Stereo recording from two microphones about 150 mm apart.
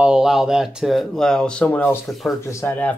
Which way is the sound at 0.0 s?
5° right (ahead or behind).